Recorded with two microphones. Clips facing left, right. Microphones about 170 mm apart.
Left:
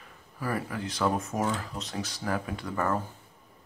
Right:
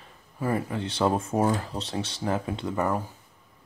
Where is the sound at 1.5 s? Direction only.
30° right (ahead or behind).